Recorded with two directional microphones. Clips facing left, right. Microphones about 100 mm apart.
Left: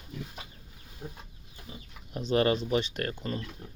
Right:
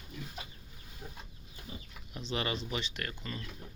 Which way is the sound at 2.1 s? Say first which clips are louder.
Left 10 dB; 45° left (ahead or behind).